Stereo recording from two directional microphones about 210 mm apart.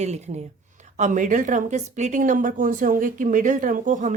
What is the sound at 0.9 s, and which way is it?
A woman's voice, 35° right (ahead or behind).